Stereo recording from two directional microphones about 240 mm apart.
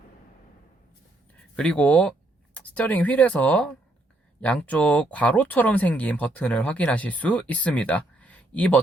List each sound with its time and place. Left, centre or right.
1.5 s speech: centre